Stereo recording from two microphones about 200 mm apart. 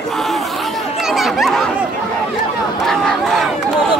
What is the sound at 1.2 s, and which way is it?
Chatter, centre (ahead or behind).